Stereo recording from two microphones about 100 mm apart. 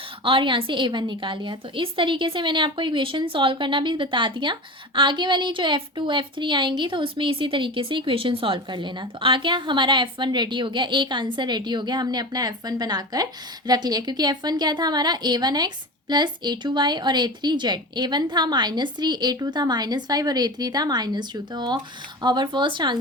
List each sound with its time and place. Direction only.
0.3 s a woman's voice: 55° right (ahead or behind)